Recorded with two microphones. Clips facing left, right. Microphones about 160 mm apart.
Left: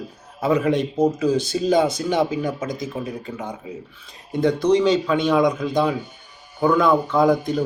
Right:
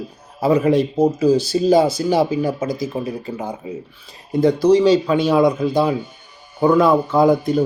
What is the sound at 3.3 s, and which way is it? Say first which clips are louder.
Speech: right 4 dB; 35° right (ahead or behind).